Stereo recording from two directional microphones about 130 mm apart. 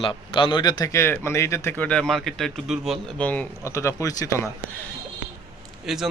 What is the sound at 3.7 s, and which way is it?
Speech, 25° left (ahead or behind).